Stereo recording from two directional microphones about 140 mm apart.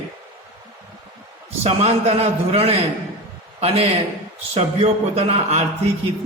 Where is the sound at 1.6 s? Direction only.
50° right (ahead or behind).